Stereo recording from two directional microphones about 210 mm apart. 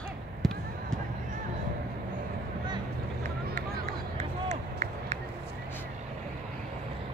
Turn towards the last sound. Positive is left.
turn(degrees=-35)  # may be behind; listen again after turning